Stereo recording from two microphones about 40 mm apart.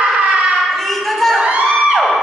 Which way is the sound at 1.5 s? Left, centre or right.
Right.